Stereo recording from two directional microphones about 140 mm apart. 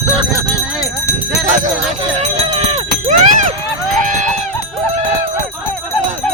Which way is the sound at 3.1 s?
65° right (ahead or behind).